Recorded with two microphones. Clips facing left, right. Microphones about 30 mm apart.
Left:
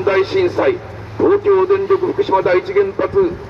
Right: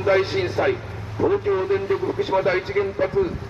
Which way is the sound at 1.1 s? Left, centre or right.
Left.